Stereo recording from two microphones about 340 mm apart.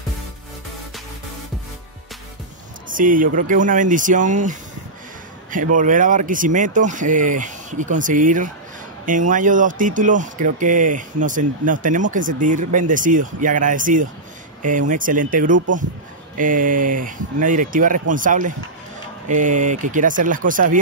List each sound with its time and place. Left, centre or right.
2.9 s speech: right
5.8 s speech: right